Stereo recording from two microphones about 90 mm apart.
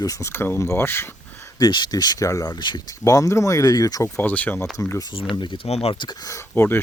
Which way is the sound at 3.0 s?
40° left (ahead or behind).